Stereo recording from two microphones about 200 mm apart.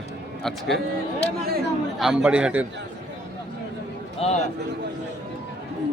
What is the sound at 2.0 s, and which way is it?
Speech, 5° right (ahead or behind).